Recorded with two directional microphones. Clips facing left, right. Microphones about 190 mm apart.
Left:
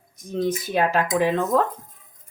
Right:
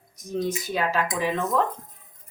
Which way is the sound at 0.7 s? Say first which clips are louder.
Left 6 dB; 60° left (ahead or behind).